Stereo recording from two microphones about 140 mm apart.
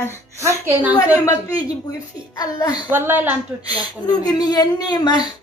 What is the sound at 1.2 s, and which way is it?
A woman's voice, 25° left (ahead or behind).